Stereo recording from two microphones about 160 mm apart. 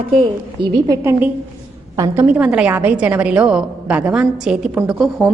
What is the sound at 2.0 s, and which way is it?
A woman's voice, 10° right (ahead or behind).